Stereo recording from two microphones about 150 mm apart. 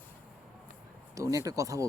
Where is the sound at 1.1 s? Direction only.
20° right (ahead or behind).